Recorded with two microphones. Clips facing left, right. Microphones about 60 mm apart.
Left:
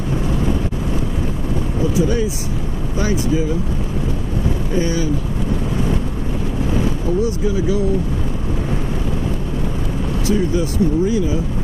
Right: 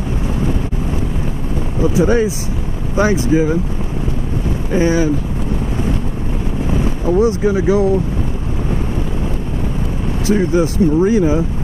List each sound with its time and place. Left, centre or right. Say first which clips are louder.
2.0 s speech: right 6 dB; right
4.7 s speech: right 6 dB; right
7.1 s speech: right 8 dB; right
10.3 s speech: right 5 dB; right